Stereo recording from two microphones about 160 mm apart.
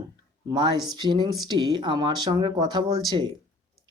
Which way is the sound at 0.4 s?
30° right (ahead or behind).